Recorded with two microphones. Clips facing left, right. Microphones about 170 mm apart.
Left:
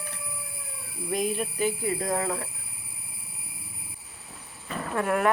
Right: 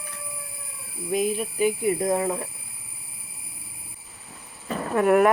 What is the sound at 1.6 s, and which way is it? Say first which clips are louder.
Speech: right 6 dB; 20° right (ahead or behind).